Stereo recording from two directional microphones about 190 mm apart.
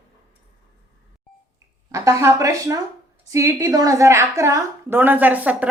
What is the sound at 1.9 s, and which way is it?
A woman's voice, 15° right (ahead or behind).